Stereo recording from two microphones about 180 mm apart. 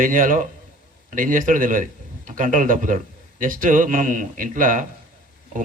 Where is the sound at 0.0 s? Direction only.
50° right (ahead or behind).